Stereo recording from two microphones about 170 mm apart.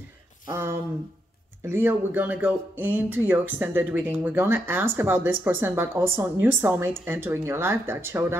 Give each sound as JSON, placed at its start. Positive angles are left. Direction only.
{"t": 0.5, "sound": "speech", "side_deg": -15}